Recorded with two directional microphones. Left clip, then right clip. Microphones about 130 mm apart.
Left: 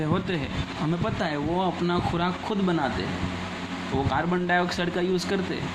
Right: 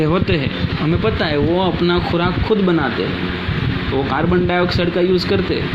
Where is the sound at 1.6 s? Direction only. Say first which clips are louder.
Right 9 dB; 15° right (ahead or behind).